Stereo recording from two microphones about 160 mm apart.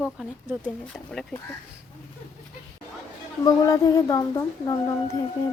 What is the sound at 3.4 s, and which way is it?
A woman's voice, 20° left (ahead or behind).